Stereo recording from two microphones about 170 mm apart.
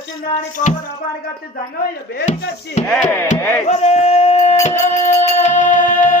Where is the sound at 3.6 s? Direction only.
40° left (ahead or behind).